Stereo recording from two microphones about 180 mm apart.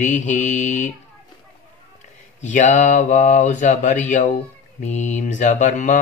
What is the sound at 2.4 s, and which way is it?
Speech, 40° left (ahead or behind).